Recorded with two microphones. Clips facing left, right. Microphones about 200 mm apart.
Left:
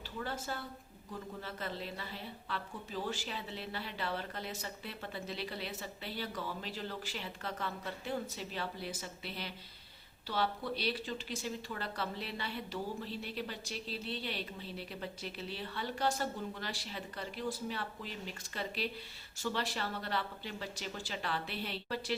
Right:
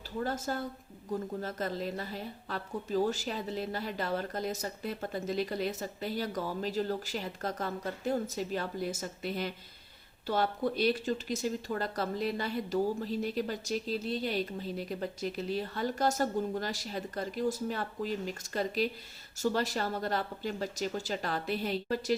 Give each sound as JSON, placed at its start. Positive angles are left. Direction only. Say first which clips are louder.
{"t": 0.2, "sound": "speech", "louder": "right 7 dB", "side_deg": -40}